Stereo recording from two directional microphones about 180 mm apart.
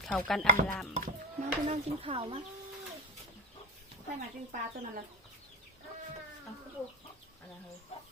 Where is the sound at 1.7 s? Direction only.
30° right (ahead or behind).